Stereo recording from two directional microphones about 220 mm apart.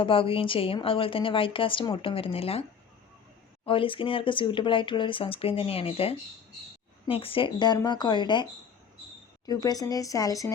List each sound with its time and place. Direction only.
0.0 s a woman's voice: 25° left (ahead or behind)
3.7 s a woman's voice: 25° left (ahead or behind)
9.5 s speech: 15° left (ahead or behind)